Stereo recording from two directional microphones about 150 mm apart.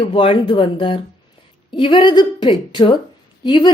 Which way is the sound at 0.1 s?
35° left (ahead or behind).